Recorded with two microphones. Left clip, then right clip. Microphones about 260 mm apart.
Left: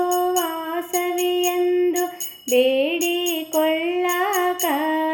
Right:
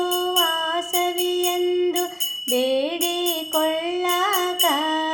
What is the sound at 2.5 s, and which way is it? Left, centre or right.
Music, right.